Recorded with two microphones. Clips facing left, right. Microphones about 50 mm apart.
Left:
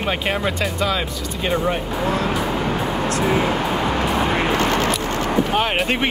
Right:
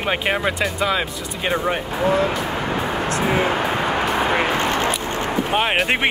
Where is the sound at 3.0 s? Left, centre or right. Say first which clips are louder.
Even; right; by 4.6 s centre.